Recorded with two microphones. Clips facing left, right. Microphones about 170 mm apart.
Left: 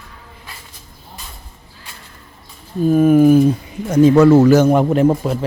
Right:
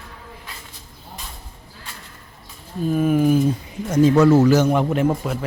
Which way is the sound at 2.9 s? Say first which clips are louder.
Left 7 dB; 50° left (ahead or behind).